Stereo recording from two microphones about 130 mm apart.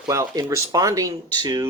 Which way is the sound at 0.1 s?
25° right (ahead or behind).